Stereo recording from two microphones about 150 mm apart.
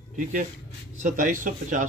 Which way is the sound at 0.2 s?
60° right (ahead or behind).